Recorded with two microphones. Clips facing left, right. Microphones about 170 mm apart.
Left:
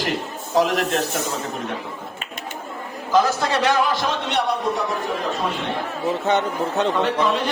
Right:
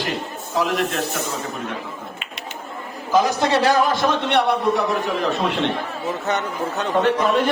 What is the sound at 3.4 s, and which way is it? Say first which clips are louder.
Speech: right 3 dB; 30° right (ahead or behind).